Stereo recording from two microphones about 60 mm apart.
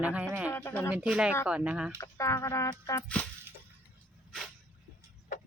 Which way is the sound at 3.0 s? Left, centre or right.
Centre.